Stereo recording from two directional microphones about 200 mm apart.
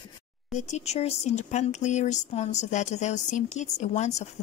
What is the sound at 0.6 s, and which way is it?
Speech, 35° left (ahead or behind).